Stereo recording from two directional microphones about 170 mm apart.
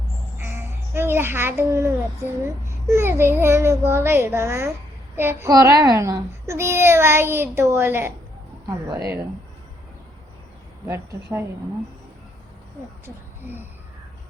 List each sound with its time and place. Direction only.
0.4 s a sound: 15° right (ahead or behind)
2.6 s a child's voice: 15° right (ahead or behind)
10.8 s a child's voice: 15° right (ahead or behind)